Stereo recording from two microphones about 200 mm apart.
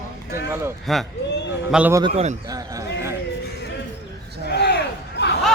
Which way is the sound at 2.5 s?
15° right (ahead or behind).